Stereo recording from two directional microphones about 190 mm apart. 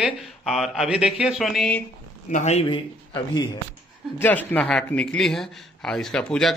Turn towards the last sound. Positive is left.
turn(degrees=5)  # may be behind; listen again after turning